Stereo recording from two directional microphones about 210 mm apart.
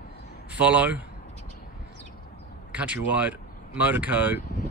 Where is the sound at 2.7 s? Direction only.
5° right (ahead or behind).